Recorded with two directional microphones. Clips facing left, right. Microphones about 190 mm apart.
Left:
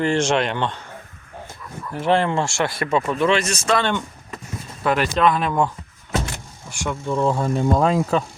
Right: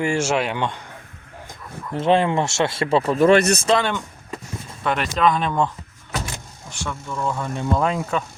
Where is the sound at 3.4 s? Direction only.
60° right (ahead or behind).